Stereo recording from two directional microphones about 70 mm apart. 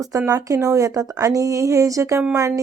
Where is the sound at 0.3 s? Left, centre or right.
Right.